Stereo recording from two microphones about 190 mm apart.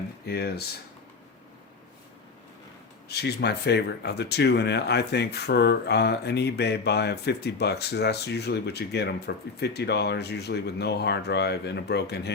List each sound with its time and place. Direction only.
0.3 s speech: 55° left (ahead or behind)
3.1 s speech: 60° left (ahead or behind)